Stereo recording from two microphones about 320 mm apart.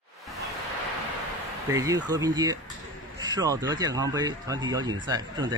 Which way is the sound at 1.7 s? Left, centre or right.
Centre.